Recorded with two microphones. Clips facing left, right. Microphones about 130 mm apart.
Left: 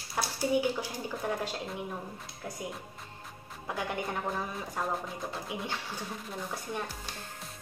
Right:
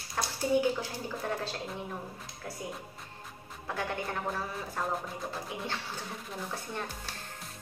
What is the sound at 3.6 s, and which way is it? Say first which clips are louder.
Speech: even; 15° left (ahead or behind).